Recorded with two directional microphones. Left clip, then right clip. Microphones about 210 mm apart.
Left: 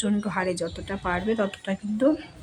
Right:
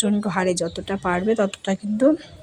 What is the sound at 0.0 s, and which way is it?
Speech, 20° right (ahead or behind).